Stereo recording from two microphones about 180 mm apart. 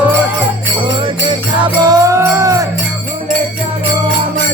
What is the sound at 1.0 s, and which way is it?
Music, 25° right (ahead or behind).